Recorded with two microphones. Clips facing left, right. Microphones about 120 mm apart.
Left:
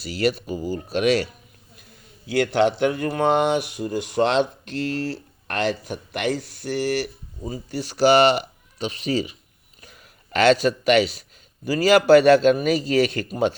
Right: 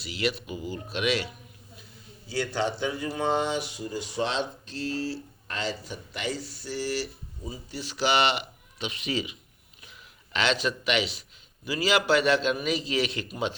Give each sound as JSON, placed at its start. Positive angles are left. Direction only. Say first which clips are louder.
{"t": 0.0, "sound": "speech", "louder": "left 7 dB", "side_deg": 45}
{"t": 2.2, "sound": "speech", "louder": "left 9 dB", "side_deg": 65}